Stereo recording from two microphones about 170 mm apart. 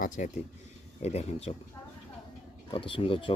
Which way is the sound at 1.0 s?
40° left (ahead or behind).